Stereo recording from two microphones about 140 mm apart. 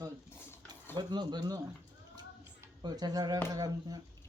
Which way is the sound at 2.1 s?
30° right (ahead or behind).